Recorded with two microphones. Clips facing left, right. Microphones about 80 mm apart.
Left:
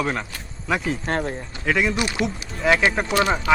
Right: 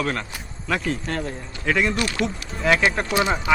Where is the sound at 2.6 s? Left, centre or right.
Centre.